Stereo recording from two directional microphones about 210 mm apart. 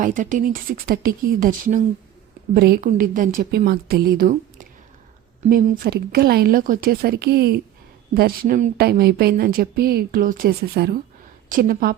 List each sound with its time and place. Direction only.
0.0 s a woman's voice: 40° right (ahead or behind)